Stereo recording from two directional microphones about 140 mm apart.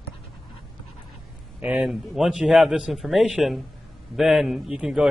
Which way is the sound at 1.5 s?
10° right (ahead or behind).